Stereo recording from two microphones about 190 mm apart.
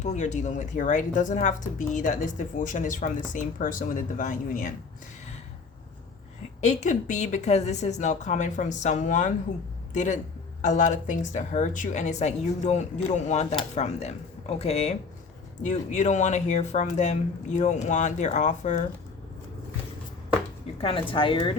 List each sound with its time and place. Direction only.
0.0 s a woman's voice: 40° left (ahead or behind)
6.6 s speech: 40° left (ahead or behind)
21.1 s a woman's voice: 25° left (ahead or behind)